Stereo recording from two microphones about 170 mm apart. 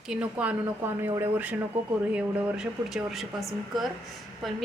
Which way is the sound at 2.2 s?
5° right (ahead or behind).